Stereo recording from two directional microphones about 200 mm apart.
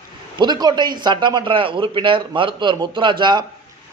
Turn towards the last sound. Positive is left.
turn(degrees=-20)  # may be behind; listen again after turning